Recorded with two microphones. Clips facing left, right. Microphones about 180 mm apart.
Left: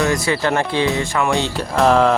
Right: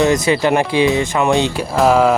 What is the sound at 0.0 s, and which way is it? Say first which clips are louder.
Speech: right 4 dB; 20° right (ahead or behind).